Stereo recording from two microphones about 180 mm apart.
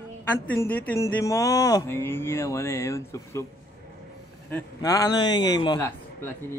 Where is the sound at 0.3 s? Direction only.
10° left (ahead or behind).